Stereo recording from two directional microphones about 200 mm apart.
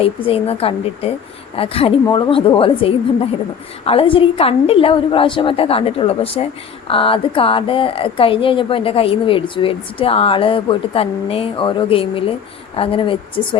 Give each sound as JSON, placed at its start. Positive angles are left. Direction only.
{"t": 0.3, "sound": "a woman's voice", "side_deg": 30}